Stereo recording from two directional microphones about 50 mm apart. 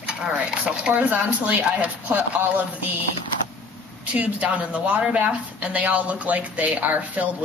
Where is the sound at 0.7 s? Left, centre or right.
Right.